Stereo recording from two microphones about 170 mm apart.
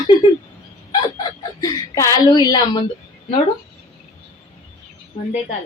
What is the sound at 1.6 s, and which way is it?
Speech, 20° left (ahead or behind).